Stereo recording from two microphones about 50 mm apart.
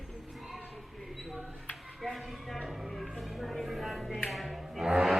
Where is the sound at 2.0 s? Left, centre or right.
Centre.